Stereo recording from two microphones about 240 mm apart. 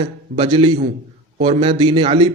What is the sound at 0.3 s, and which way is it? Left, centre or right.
A man's voice, right.